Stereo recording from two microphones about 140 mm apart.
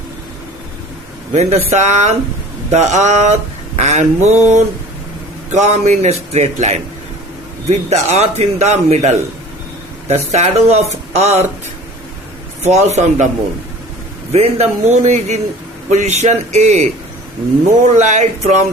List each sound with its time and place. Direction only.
1.3 s a man's voice: 50° right (ahead or behind)
12.6 s a man's voice: 55° right (ahead or behind)
14.3 s a man's voice: 50° right (ahead or behind)
17.9 s a man's voice: 55° right (ahead or behind)